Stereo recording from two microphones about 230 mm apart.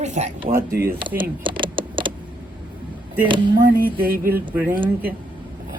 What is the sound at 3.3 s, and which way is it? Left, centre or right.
Speech, centre.